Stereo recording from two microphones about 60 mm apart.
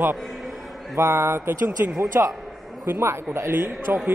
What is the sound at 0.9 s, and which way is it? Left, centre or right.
A man's voice, right.